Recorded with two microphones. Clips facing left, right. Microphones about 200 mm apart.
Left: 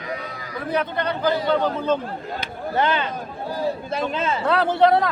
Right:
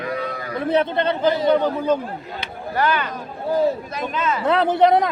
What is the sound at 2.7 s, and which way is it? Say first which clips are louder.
A man's voice: even; 25° left (ahead or behind).